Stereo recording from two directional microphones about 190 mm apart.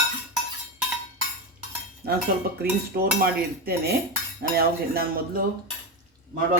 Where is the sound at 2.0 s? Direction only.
55° right (ahead or behind).